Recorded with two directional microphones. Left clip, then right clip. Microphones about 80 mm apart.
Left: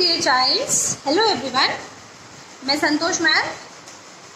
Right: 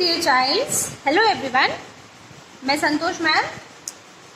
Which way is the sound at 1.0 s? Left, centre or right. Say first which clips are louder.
Right 2 dB; right.